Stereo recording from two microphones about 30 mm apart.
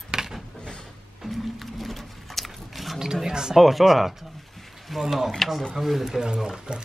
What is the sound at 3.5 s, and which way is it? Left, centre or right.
Speech, centre.